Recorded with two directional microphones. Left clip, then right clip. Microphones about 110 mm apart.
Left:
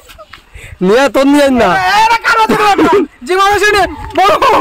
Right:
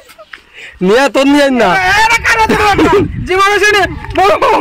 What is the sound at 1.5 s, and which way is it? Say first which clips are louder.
Speech: even; centre (ahead or behind).